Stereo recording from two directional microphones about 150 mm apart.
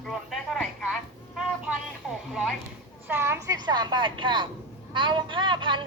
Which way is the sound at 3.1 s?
15° right (ahead or behind).